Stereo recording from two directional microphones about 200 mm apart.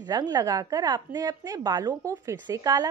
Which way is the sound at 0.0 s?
20° right (ahead or behind).